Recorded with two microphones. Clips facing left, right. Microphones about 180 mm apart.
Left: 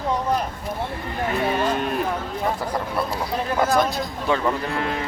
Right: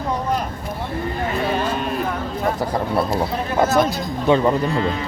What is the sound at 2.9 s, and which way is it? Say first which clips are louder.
Speech: right 5 dB; 30° right (ahead or behind).